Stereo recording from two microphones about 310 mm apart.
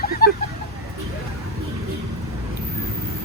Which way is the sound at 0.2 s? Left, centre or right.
Left.